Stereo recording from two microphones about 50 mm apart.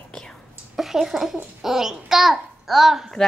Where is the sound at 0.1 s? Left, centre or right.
Centre.